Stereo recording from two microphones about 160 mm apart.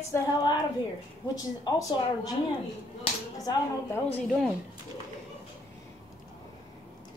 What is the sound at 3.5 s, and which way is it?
Speech, 25° left (ahead or behind).